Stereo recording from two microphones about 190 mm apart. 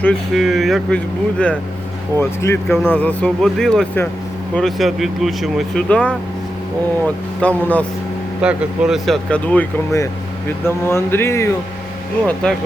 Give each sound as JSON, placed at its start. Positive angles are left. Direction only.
{"t": 0.0, "sound": "speech", "side_deg": 0}
{"t": 7.4, "sound": "speech", "side_deg": 5}
{"t": 8.4, "sound": "speech", "side_deg": -5}